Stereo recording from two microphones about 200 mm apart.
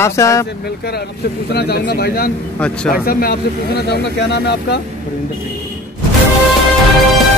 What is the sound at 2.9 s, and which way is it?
Speech, 45° left (ahead or behind).